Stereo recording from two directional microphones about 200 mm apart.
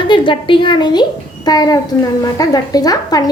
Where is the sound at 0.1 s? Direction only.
25° left (ahead or behind).